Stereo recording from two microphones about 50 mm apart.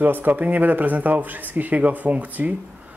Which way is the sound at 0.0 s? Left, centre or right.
Right.